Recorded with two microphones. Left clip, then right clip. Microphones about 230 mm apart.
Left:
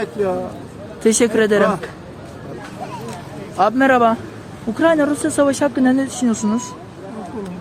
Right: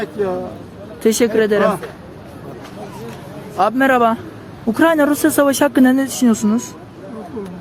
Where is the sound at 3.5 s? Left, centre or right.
Centre.